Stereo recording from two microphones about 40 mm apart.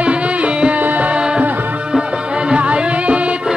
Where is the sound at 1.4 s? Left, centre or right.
Right.